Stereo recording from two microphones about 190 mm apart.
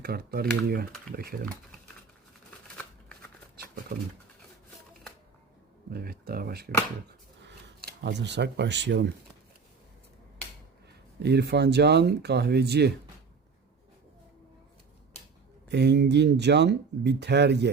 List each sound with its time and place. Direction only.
0.0 s speech: 55° right (ahead or behind)
3.9 s speech: 50° right (ahead or behind)
5.9 s speech: 55° right (ahead or behind)
7.4 s speech: 65° right (ahead or behind)
11.2 s speech: 60° right (ahead or behind)
15.7 s speech: 65° right (ahead or behind)